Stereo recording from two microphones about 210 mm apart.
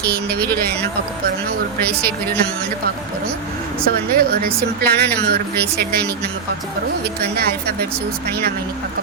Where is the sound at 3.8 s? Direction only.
45° right (ahead or behind).